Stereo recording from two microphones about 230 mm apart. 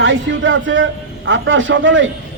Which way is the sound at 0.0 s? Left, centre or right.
Right.